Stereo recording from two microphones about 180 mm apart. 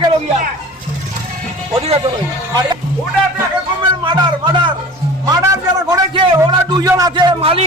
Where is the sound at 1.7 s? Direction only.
35° right (ahead or behind).